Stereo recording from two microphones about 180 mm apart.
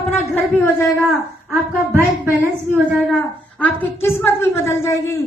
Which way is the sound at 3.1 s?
5° left (ahead or behind).